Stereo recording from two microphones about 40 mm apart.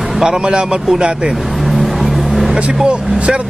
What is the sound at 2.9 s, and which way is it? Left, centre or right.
Speech, right.